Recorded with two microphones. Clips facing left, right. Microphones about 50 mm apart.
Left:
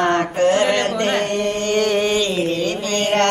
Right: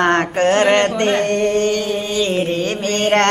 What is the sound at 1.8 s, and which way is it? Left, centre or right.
Music, left.